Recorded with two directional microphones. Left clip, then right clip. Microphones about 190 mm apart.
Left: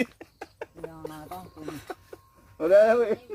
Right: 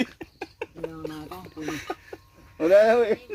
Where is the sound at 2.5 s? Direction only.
35° right (ahead or behind).